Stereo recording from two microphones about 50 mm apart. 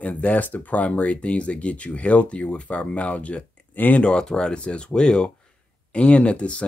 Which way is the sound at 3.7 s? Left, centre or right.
Left.